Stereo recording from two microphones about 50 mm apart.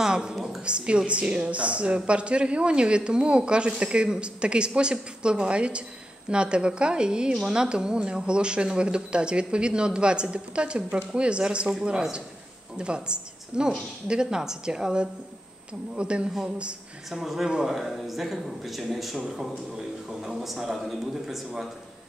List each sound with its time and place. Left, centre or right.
0.0 s a woman's voice: centre
17.1 s speech: centre